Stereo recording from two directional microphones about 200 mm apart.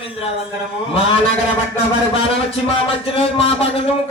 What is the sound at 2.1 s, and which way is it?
Speech, 25° left (ahead or behind).